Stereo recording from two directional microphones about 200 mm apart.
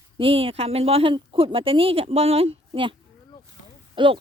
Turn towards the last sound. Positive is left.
turn(degrees=-25)  # may be behind; listen again after turning